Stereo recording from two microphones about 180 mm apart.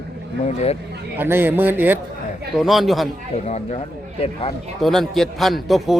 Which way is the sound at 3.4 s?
35° left (ahead or behind).